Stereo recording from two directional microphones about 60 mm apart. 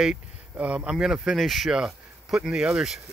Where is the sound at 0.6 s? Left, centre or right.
Centre.